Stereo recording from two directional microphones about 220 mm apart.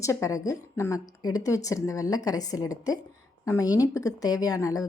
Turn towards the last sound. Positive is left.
turn(degrees=15)  # may be behind; listen again after turning